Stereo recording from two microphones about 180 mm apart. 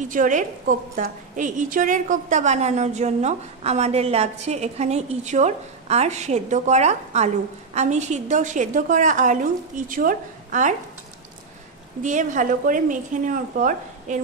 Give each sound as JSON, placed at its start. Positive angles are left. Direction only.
{"t": 0.1, "sound": "a woman's voice", "side_deg": -45}
{"t": 12.0, "sound": "a woman's voice", "side_deg": -45}